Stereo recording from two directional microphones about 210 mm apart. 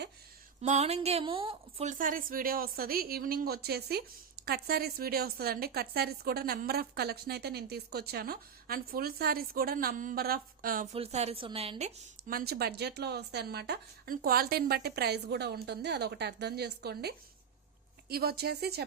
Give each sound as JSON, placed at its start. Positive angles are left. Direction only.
{"t": 0.6, "sound": "a woman's voice", "side_deg": -30}
{"t": 10.9, "sound": "a woman's voice", "side_deg": -30}
{"t": 12.3, "sound": "a woman's voice", "side_deg": -45}